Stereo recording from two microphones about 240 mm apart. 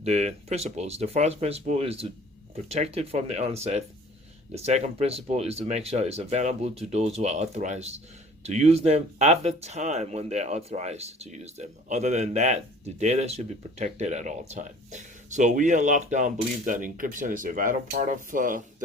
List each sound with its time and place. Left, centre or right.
0.0 s speech: right